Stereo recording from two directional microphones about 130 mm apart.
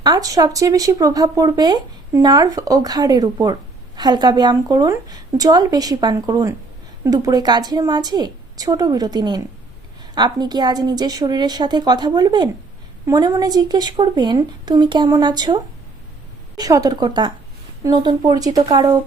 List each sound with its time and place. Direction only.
0.0 s a woman's voice: 30° right (ahead or behind)